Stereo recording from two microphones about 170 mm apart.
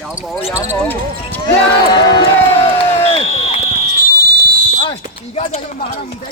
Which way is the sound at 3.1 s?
35° left (ahead or behind).